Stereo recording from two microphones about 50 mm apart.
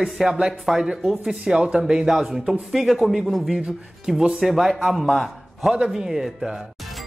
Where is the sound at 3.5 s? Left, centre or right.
Centre.